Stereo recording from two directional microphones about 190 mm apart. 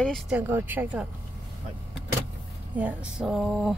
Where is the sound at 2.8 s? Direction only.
5° right (ahead or behind).